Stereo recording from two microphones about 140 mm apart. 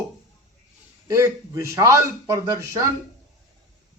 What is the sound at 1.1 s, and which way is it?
A man's voice, 20° right (ahead or behind).